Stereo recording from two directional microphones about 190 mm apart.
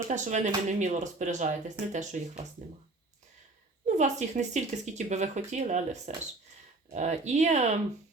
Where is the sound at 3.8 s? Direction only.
40° right (ahead or behind).